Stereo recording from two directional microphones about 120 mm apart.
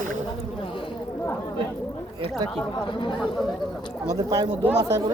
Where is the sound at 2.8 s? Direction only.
45° left (ahead or behind).